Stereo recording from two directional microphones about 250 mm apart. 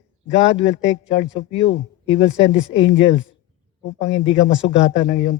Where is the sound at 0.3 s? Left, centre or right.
Left.